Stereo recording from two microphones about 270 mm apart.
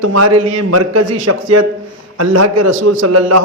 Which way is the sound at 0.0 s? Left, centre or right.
Right.